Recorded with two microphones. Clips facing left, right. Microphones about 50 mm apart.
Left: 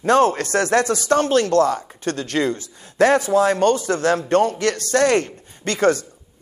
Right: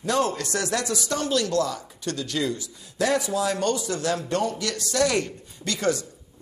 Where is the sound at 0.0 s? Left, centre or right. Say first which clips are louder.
Left 8 dB; left.